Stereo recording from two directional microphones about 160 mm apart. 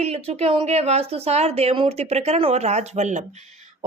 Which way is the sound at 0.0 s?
40° right (ahead or behind).